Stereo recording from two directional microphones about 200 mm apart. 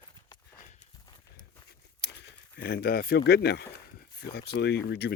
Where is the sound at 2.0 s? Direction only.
55° left (ahead or behind).